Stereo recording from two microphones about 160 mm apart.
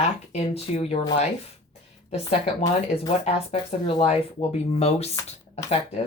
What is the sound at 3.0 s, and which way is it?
Speech, 40° left (ahead or behind).